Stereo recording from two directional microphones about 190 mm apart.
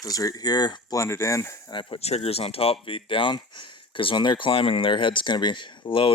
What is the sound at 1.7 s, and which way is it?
Speech, 30° left (ahead or behind).